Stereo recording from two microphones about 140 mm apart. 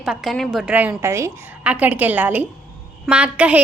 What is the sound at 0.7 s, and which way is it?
A woman's voice, 15° right (ahead or behind).